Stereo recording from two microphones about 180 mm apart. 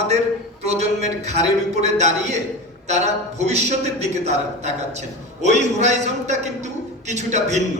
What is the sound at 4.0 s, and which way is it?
A man's voice, 40° right (ahead or behind).